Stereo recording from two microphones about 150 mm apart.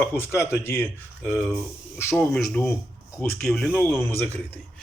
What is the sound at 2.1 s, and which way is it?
Speech, 5° left (ahead or behind).